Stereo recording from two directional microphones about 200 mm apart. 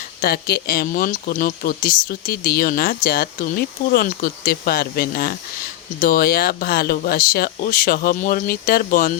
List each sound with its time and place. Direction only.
0.2 s speech: 50° left (ahead or behind)